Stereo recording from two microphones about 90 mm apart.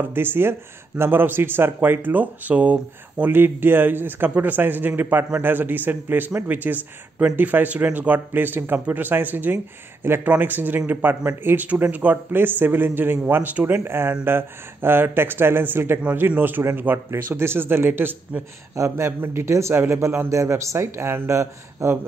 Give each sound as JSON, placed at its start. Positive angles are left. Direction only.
{"t": 0.0, "sound": "a man's voice", "side_deg": -25}